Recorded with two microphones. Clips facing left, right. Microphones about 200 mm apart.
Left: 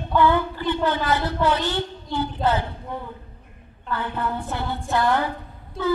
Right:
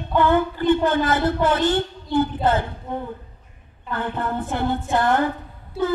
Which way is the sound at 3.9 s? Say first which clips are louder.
Right 1 dB; 50° right (ahead or behind).